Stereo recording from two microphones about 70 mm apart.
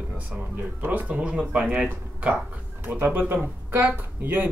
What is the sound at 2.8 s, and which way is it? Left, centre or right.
Speech, right.